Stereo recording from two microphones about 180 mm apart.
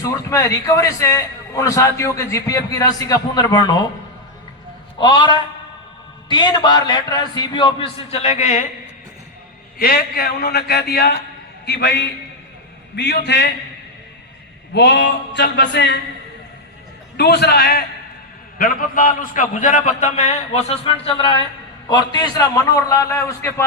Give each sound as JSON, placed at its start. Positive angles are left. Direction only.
{"t": 0.0, "sound": "a man's voice", "side_deg": 20}
{"t": 4.9, "sound": "a man's voice", "side_deg": 25}
{"t": 9.7, "sound": "a man's voice", "side_deg": 55}
{"t": 11.6, "sound": "a sound", "side_deg": 70}
{"t": 14.7, "sound": "a sound", "side_deg": 75}
{"t": 17.2, "sound": "a man's voice", "side_deg": 65}